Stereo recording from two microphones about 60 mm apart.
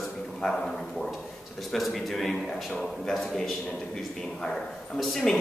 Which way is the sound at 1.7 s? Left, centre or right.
Centre.